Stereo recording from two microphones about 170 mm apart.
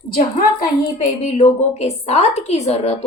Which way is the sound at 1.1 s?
40° left (ahead or behind).